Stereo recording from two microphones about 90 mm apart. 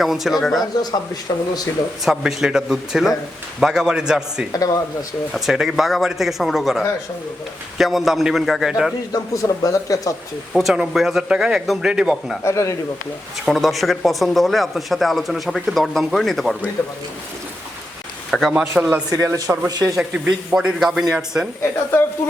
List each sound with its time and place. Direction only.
0.0 s speech: centre (ahead or behind)
0.8 s speech: 50° left (ahead or behind)
2.0 s a man's voice: 5° right (ahead or behind)
4.5 s speech: 40° left (ahead or behind)
5.3 s speech: 5° right (ahead or behind)
9.1 s speech: 40° left (ahead or behind)
10.5 s speech: 5° right (ahead or behind)
12.5 s speech: 35° left (ahead or behind)
13.4 s speech: centre (ahead or behind)
16.8 s a man's voice: 20° left (ahead or behind)
18.3 s a sound: centre (ahead or behind)
18.7 s a man's voice: 20° right (ahead or behind)
19.1 s speech: 40° right (ahead or behind)
20.0 s a man's voice: 10° right (ahead or behind)